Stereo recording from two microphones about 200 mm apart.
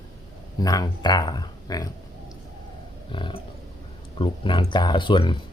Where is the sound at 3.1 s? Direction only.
25° left (ahead or behind).